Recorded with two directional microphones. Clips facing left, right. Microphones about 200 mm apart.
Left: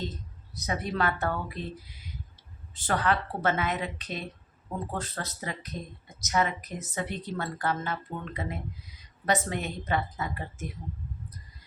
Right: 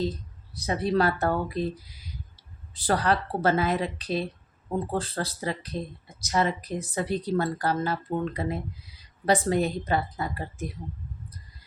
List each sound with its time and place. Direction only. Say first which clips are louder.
0.5 s speech: right 6 dB; 30° right (ahead or behind)